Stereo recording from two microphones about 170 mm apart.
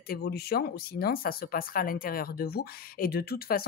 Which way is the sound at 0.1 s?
65° left (ahead or behind).